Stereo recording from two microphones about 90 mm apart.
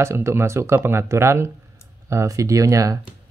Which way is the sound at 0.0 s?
30° right (ahead or behind).